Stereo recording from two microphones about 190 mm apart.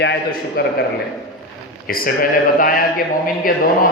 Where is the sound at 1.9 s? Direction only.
50° left (ahead or behind).